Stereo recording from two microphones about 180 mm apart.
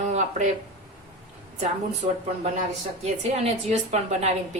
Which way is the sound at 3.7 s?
40° right (ahead or behind).